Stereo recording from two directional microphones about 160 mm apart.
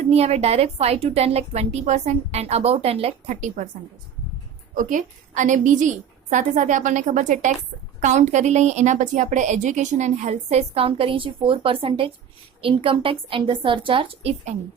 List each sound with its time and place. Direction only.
0.1 s a woman's voice: 40° right (ahead or behind)
4.7 s a woman's voice: 55° right (ahead or behind); by 14.5 s 35° right (ahead or behind)